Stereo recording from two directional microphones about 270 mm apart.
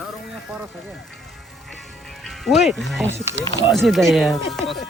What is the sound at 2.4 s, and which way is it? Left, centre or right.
Speech, centre.